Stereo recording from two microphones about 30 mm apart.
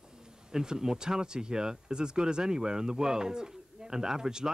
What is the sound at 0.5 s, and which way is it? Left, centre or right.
Speech, right.